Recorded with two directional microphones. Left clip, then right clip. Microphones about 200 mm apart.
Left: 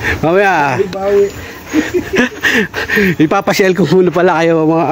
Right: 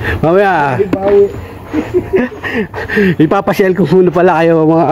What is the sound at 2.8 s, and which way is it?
Speech, centre (ahead or behind).